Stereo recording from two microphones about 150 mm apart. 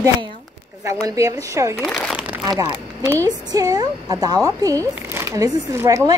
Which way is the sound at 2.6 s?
15° right (ahead or behind).